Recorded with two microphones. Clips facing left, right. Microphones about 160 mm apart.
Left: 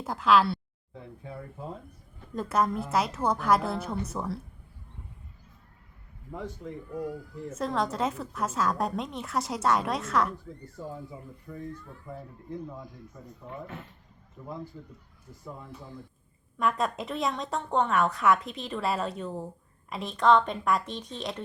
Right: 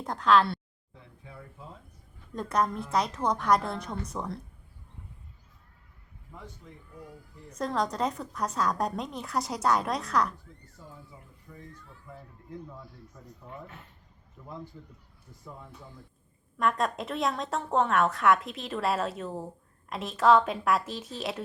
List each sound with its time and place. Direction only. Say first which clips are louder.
0.0 s a woman's voice: even; 5° left (ahead or behind)
2.3 s a woman's voice: left 1 dB; 5° left (ahead or behind)
6.3 s speech: left 10 dB; 80° left
7.6 s a woman's voice: even; centre (ahead or behind)
10.8 s speech: left 10 dB; 65° left (ahead or behind)
12.7 s speech: left 4 dB; 15° left (ahead or behind)
16.6 s a woman's voice: even; centre (ahead or behind)